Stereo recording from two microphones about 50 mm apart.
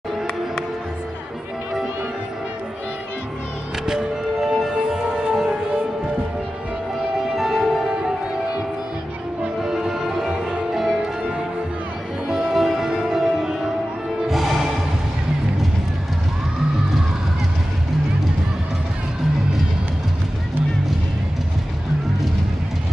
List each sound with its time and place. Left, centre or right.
3.8 s music: centre
7.3 s music: centre
9.6 s music: centre